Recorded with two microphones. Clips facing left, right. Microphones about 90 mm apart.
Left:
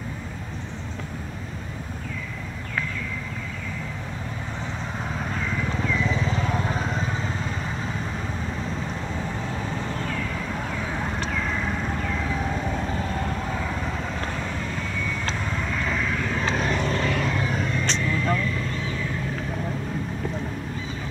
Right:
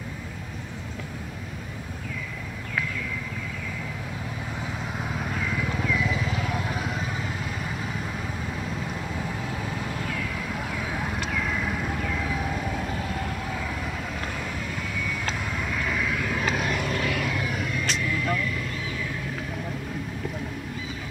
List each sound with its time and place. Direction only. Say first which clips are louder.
5.1 s vehicle: left 1 dB; 5° right (ahead or behind)
6.2 s vehicle: left 3 dB; 30° left (ahead or behind)
8.6 s vehicle: left 2 dB; 10° right (ahead or behind)
12.4 s vehicle: left 2 dB; 35° left (ahead or behind)
15.5 s vehicle: left 1 dB; 10° right (ahead or behind)
16.4 s vehicle: left 3 dB; 30° left (ahead or behind)